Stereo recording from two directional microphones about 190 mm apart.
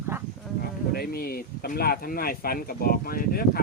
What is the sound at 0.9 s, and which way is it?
Speech, 55° left (ahead or behind).